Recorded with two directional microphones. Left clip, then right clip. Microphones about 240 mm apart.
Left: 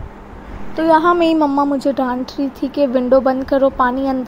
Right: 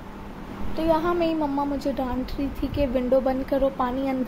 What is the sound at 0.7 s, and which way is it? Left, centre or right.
A woman's voice, left.